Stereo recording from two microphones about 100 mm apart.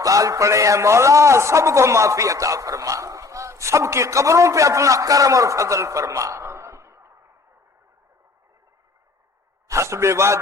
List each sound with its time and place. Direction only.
0.0 s a man's voice: 35° right (ahead or behind)
9.6 s a man's voice: 30° right (ahead or behind)